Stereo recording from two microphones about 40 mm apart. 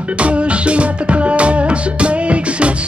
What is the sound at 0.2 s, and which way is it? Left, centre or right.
Music, right.